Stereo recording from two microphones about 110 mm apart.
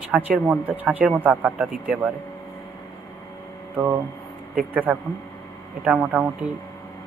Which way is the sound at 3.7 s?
25° right (ahead or behind).